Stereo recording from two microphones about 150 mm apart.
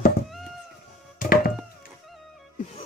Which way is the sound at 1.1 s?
80° left.